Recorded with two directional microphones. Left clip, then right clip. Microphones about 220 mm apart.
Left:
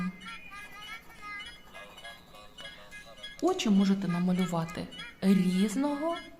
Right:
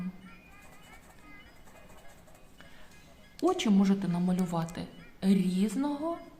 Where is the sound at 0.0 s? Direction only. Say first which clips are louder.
Left 7 dB; 55° left (ahead or behind).